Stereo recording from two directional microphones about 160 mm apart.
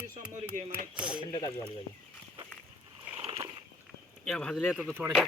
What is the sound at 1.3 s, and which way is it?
Speech, 30° left (ahead or behind).